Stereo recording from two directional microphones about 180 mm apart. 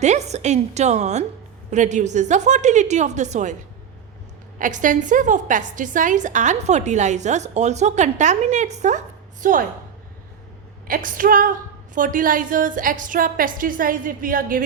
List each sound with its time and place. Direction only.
0.0 s a woman's voice: 40° right (ahead or behind)
4.5 s a woman's voice: 45° right (ahead or behind)
10.8 s a woman's voice: 50° right (ahead or behind)